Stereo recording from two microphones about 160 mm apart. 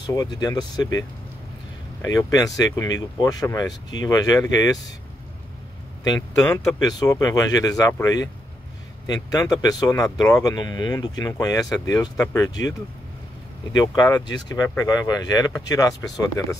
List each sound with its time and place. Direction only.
0.0 s speech: 25° left (ahead or behind)
6.0 s speech: 20° left (ahead or behind)
13.7 s speech: 25° left (ahead or behind)